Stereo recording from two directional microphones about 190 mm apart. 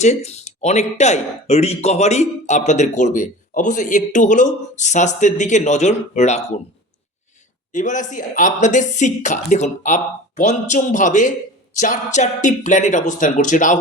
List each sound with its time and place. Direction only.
0.0 s speech: 35° left (ahead or behind)
7.7 s speech: 40° left (ahead or behind)